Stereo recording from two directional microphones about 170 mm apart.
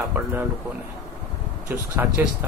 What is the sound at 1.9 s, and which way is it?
Speech, 10° right (ahead or behind).